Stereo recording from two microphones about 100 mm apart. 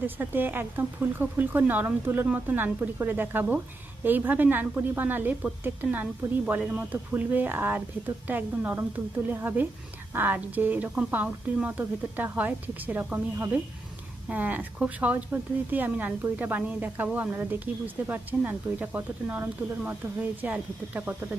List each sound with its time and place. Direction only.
0.0 s speech: 20° right (ahead or behind)